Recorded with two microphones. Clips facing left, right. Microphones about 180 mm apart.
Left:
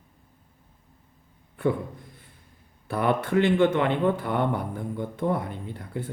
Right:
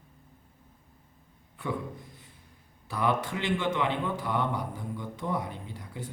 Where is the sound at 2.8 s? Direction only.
55° left (ahead or behind).